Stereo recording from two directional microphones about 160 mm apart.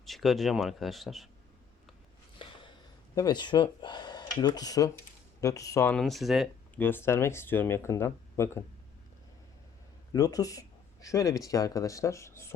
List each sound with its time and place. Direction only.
0.0 s speech: centre (ahead or behind)
2.4 s a sound: 30° left (ahead or behind)
3.2 s speech: 25° left (ahead or behind)
5.9 s speech: centre (ahead or behind)
6.7 s speech: 15° left (ahead or behind)
10.1 s speech: 20° left (ahead or behind)